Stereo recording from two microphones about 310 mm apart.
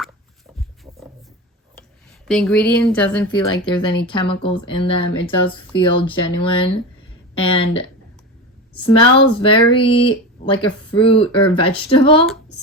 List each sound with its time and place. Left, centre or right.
2.2 s speech: centre